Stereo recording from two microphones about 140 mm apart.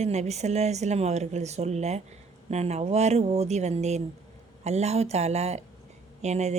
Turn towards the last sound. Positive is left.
turn(degrees=-55)  # may be behind; listen again after turning